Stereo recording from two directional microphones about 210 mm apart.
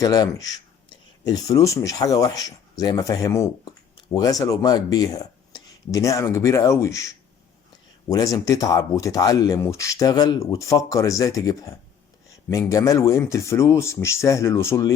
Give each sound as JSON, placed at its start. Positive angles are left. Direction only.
{"t": 0.0, "sound": "speech", "side_deg": 15}